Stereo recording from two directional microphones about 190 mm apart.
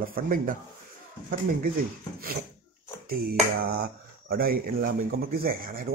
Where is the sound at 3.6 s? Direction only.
55° right (ahead or behind).